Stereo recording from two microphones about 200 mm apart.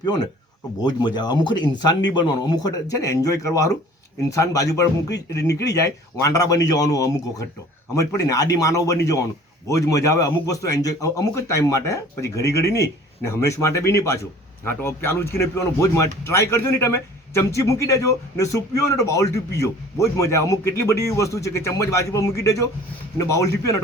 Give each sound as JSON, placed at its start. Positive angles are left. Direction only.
{"t": 0.0, "sound": "speech", "side_deg": 20}